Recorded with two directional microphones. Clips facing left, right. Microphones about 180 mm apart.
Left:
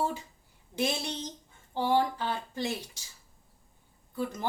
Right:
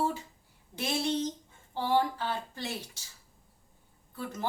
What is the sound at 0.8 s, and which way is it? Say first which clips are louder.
Speech: right 1 dB; 15° left (ahead or behind).